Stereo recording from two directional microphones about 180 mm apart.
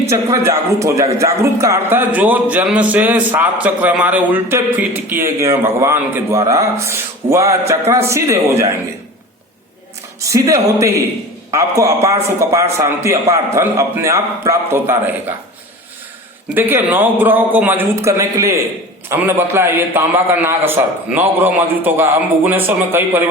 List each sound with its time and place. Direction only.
0.1 s a man's voice: 15° right (ahead or behind)
10.2 s a man's voice: 15° right (ahead or behind)
16.6 s a man's voice: 10° right (ahead or behind)